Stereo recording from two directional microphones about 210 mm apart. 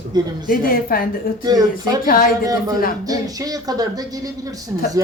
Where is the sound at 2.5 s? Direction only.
15° right (ahead or behind).